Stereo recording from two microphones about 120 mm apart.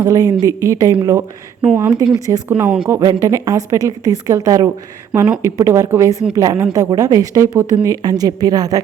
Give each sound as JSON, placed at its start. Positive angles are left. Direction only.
{"t": 0.0, "sound": "a woman's voice", "side_deg": -30}
{"t": 1.6, "sound": "speech", "side_deg": -10}
{"t": 2.1, "sound": "a woman's voice", "side_deg": -30}
{"t": 2.5, "sound": "speech", "side_deg": -10}
{"t": 3.1, "sound": "a woman's voice", "side_deg": -25}